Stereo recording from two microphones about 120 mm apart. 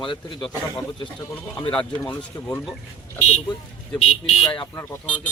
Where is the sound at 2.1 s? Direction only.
15° left (ahead or behind).